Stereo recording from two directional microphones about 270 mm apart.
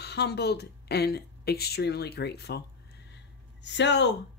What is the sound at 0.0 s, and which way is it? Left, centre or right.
A woman's voice, left.